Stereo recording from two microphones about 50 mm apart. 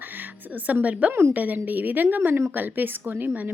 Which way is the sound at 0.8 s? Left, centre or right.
Right.